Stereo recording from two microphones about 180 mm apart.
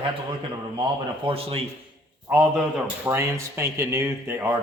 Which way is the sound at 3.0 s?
15° right (ahead or behind).